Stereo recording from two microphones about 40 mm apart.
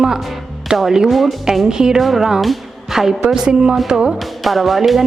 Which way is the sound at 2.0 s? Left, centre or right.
Centre.